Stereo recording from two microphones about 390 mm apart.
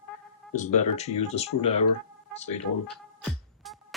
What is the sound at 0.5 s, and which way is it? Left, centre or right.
Speech, centre.